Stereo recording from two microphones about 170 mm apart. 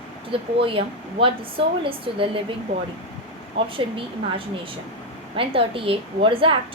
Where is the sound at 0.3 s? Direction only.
30° right (ahead or behind).